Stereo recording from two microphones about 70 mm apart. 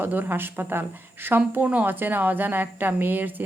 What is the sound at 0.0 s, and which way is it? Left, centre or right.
A woman's voice, right.